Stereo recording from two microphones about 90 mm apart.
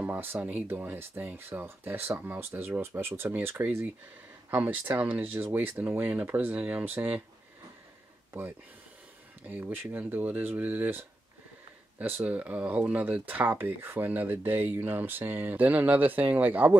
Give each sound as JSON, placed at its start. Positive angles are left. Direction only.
{"t": 0.0, "sound": "speech", "side_deg": -20}
{"t": 8.3, "sound": "speech", "side_deg": -25}
{"t": 12.3, "sound": "speech", "side_deg": -15}